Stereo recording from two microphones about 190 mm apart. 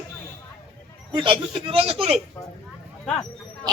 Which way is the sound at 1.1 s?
25° right (ahead or behind).